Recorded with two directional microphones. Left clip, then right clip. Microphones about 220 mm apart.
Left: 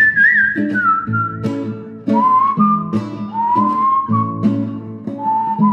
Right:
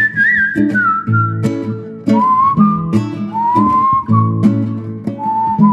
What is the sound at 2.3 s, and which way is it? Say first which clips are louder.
Whistling: right 1 dB; 30° right (ahead or behind).